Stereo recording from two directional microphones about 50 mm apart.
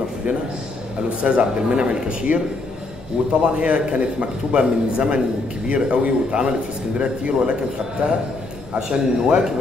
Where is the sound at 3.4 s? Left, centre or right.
Right.